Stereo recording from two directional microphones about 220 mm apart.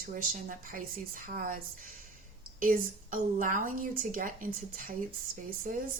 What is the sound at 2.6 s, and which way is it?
A woman's voice, 40° right (ahead or behind).